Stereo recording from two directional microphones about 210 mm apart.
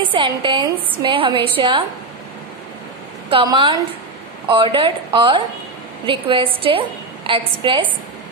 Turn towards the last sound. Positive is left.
turn(degrees=-25)  # may be behind; listen again after turning